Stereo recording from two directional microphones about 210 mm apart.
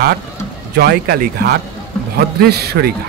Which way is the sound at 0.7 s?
45° right (ahead or behind).